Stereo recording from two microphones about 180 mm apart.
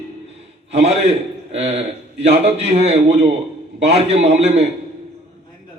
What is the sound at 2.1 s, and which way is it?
Speech, 70° right (ahead or behind).